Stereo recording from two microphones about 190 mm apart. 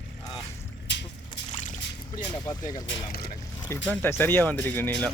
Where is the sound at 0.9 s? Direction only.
65° left (ahead or behind).